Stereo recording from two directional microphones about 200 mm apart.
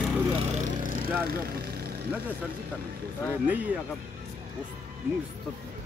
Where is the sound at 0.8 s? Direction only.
45° right (ahead or behind).